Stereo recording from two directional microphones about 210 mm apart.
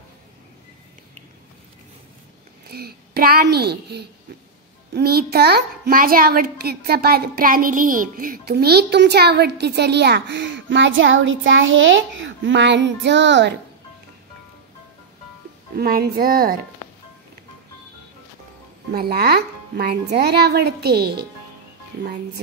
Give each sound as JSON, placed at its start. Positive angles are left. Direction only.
{"t": 2.7, "sound": "a child's voice", "side_deg": -45}
{"t": 15.7, "sound": "a child's voice", "side_deg": -50}
{"t": 18.9, "sound": "a child's voice", "side_deg": -45}